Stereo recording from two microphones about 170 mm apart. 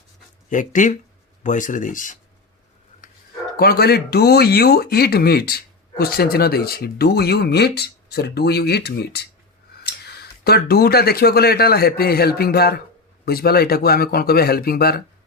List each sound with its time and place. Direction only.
0.5 s speech: 50° left (ahead or behind)
3.6 s speech: 65° left (ahead or behind)